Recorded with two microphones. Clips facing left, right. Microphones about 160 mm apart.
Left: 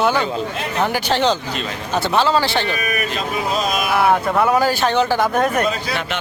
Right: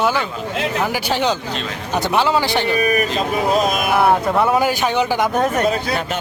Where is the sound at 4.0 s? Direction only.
Centre (ahead or behind).